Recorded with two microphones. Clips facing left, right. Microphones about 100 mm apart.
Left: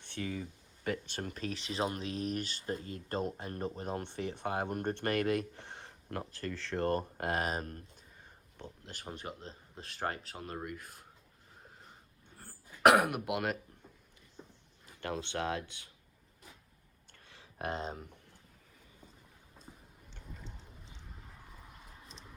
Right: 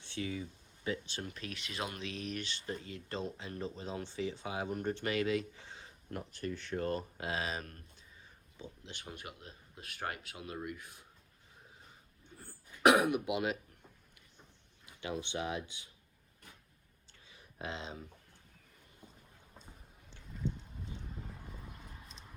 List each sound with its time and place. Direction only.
0.0 s speech: 50° left (ahead or behind)
8.2 s a sound: 60° left (ahead or behind)
8.9 s speech: 40° left (ahead or behind)
9.2 s speech: 30° left (ahead or behind); by 11.0 s 45° left (ahead or behind)
12.4 s throat clearing: 50° left (ahead or behind)
15.1 s speech: 60° left (ahead or behind)
17.1 s a sound: 70° left (ahead or behind)
17.7 s speech: 45° left (ahead or behind)
21.6 s a sound: centre (ahead or behind)